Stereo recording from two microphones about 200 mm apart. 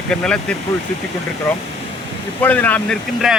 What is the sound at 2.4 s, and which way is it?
Speech, 5° left (ahead or behind).